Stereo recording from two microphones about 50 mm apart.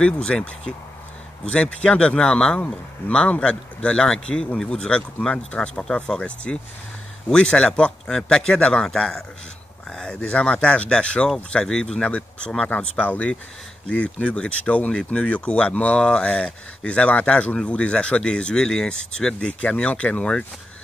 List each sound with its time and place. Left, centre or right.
0.0 s speech: centre